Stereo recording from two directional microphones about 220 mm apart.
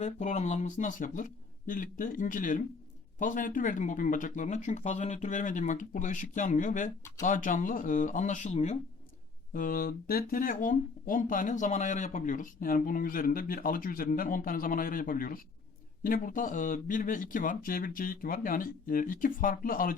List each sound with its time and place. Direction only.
0.0 s speech: 30° left (ahead or behind)
9.5 s speech: 40° left (ahead or behind)